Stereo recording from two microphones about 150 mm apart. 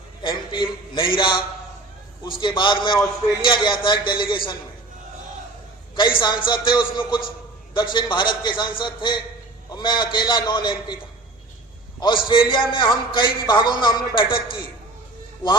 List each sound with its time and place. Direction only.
0.2 s a man's voice: 35° left (ahead or behind)
6.1 s a man's voice: 30° left (ahead or behind)
11.9 s a man's voice: 30° left (ahead or behind)